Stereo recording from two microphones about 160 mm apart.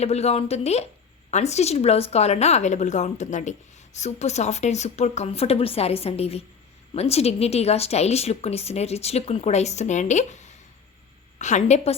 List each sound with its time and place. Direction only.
0.0 s speech: 40° left (ahead or behind)